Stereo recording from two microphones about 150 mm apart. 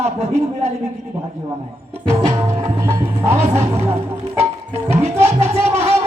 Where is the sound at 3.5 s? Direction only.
45° right (ahead or behind).